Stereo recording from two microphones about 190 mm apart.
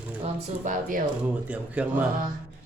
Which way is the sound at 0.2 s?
40° right (ahead or behind).